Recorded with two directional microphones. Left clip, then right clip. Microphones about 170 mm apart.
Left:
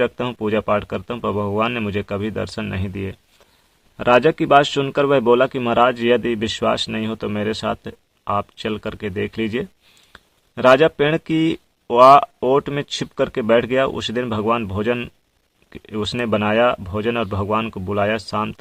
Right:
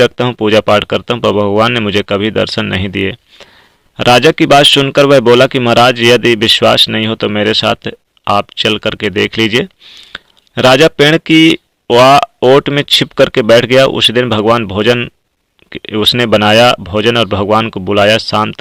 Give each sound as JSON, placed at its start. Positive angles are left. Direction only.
{"t": 0.0, "sound": "speech", "side_deg": -30}